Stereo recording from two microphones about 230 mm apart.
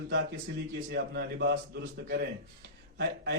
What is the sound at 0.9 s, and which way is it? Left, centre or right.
Speech, right.